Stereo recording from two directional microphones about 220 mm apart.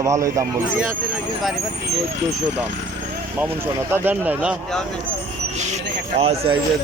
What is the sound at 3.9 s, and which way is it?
Speech, 10° right (ahead or behind).